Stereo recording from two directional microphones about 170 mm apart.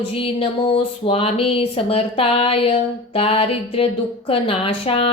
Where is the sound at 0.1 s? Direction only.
35° left (ahead or behind).